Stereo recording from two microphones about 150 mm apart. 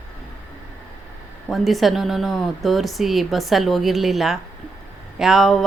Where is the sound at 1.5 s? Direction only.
Centre (ahead or behind).